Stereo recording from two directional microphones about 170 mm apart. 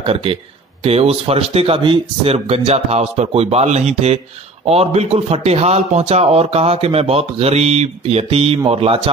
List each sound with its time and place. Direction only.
0.0 s a man's voice: 35° right (ahead or behind)